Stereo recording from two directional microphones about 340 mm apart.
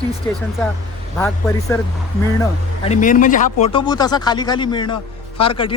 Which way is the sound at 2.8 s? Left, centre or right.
Left.